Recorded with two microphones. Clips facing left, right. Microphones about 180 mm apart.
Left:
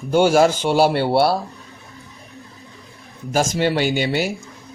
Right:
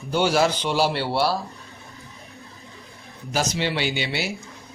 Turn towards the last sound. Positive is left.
turn(degrees=45)  # may be behind; listen again after turning